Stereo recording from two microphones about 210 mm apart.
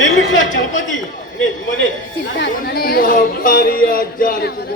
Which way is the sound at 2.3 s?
50° left (ahead or behind).